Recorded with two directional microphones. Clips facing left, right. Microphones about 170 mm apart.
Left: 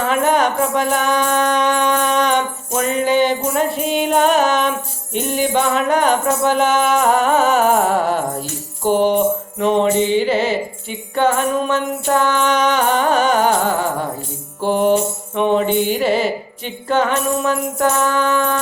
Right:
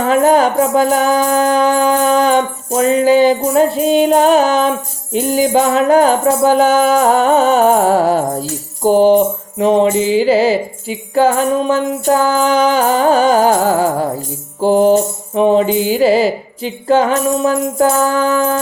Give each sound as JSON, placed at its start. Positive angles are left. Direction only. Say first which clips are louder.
{"t": 0.0, "sound": "music", "louder": "right 5 dB", "side_deg": -35}